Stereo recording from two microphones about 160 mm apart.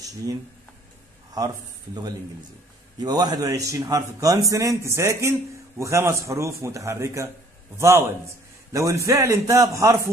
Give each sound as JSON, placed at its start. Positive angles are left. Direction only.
{"t": 0.0, "sound": "a man's voice", "side_deg": -20}